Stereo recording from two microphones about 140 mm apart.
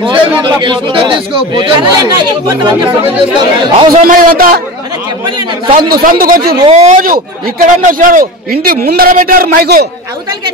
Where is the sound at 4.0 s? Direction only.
90° right.